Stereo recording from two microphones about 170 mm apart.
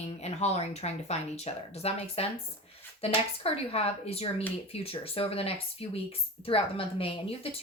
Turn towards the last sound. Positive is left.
turn(degrees=35)  # may be behind; listen again after turning